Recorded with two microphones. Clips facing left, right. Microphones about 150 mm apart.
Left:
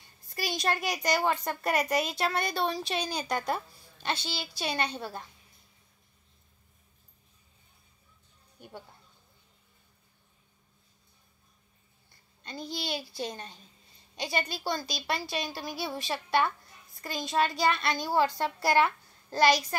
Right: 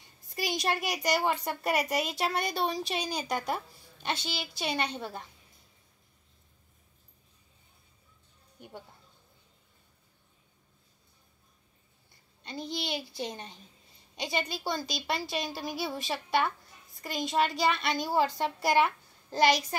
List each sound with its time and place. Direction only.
0.0 s a woman's voice: 15° right (ahead or behind)
8.5 s a sound: 20° right (ahead or behind)
12.4 s a child's voice: 20° right (ahead or behind)